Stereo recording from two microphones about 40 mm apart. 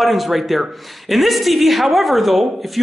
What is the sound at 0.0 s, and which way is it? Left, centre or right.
A woman's voice, centre.